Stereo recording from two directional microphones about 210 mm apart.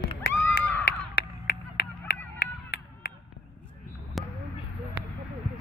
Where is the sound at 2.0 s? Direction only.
45° left (ahead or behind).